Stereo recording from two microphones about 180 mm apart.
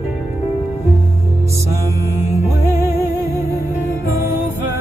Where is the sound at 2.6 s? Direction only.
15° right (ahead or behind).